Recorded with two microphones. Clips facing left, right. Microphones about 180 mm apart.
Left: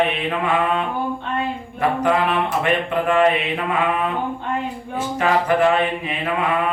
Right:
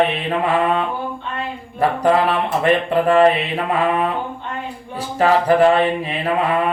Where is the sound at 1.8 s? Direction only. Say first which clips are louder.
Right 3 dB; 35° right (ahead or behind).